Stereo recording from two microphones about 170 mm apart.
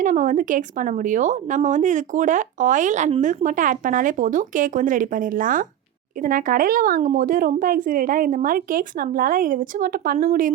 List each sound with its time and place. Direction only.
0.0 s a woman's voice: 50° right (ahead or behind)